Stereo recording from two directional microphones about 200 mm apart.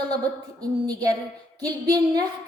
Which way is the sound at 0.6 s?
20° right (ahead or behind).